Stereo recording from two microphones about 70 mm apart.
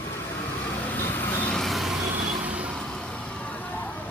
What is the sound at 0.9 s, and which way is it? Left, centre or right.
Vehicle, left.